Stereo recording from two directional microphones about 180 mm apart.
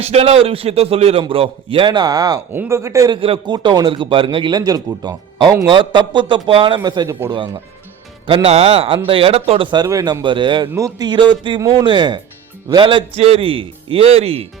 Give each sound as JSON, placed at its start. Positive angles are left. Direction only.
{"t": 0.0, "sound": "a man's voice", "side_deg": -35}
{"t": 3.2, "sound": "a man's voice", "side_deg": -30}